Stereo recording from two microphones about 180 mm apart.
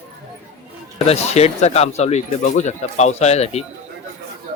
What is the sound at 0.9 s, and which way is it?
Speech, 35° left (ahead or behind).